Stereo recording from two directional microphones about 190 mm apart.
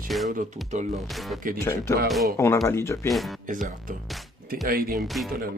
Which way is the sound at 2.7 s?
15° left (ahead or behind).